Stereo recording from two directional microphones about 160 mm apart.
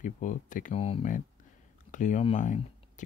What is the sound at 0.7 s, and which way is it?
Speech, 40° left (ahead or behind).